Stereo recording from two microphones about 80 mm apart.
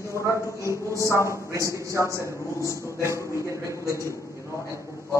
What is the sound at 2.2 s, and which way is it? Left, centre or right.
A man's voice, left.